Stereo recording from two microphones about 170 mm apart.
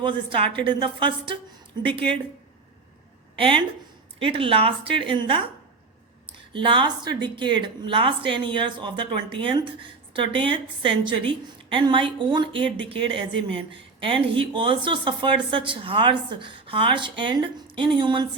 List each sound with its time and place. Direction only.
0.0 s a woman's voice: 30° right (ahead or behind)
3.3 s speech: 30° right (ahead or behind)
6.5 s a woman's voice: 30° right (ahead or behind)